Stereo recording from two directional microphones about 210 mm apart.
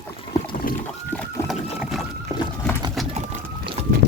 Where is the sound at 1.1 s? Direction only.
10° left (ahead or behind).